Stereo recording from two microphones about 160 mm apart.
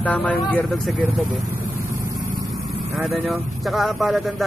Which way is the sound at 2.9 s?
Centre (ahead or behind).